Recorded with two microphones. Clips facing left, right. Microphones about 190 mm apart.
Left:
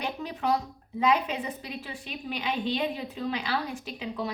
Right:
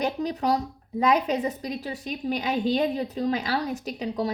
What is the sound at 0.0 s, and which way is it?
A woman's voice, 40° right (ahead or behind).